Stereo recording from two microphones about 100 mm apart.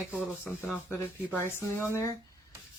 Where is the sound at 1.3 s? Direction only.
25° left (ahead or behind).